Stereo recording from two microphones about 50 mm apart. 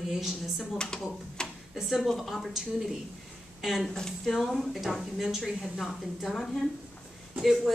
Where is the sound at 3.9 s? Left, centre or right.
Centre.